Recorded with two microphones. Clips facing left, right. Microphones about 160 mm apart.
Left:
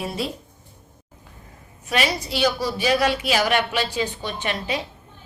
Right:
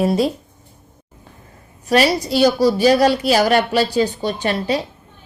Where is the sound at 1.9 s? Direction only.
40° right (ahead or behind).